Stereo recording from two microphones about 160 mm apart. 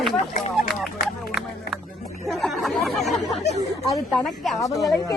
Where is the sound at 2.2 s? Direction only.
Centre (ahead or behind).